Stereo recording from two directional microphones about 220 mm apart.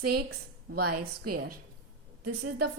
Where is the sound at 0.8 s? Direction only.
90° right.